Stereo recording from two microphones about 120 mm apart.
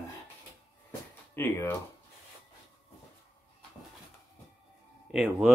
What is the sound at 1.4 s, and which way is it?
Speech, 20° left (ahead or behind).